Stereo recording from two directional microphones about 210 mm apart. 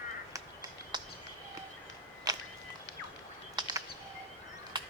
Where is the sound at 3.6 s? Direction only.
20° right (ahead or behind).